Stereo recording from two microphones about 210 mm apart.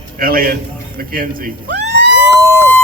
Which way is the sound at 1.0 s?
45° right (ahead or behind).